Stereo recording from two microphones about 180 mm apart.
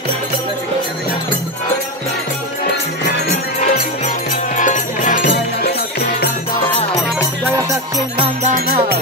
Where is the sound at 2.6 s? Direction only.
70° left (ahead or behind).